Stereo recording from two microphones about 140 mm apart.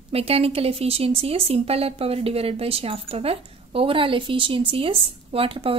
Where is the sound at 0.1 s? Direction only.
45° right (ahead or behind).